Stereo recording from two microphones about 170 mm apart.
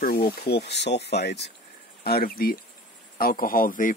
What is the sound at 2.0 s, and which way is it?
Speech, 65° left (ahead or behind).